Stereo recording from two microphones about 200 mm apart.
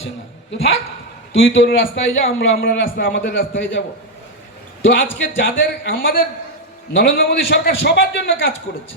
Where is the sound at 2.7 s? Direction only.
65° left (ahead or behind).